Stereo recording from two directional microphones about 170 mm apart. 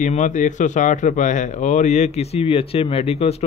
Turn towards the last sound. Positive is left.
turn(degrees=35)  # may be behind; listen again after turning